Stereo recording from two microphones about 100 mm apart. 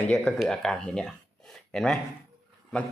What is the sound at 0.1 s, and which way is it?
A man's voice, 5° left (ahead or behind).